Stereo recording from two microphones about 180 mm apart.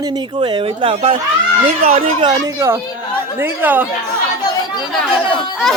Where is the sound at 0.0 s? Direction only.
25° right (ahead or behind).